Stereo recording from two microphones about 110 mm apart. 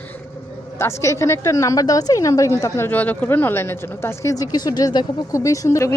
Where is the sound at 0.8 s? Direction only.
25° left (ahead or behind).